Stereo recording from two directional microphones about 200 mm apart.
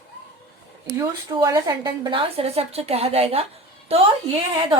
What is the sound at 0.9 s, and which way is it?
A woman's voice, 15° right (ahead or behind).